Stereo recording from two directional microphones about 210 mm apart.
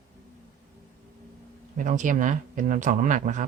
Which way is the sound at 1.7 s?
40° right (ahead or behind).